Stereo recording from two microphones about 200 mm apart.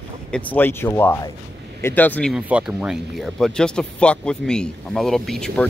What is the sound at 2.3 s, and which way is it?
Speech, 5° right (ahead or behind).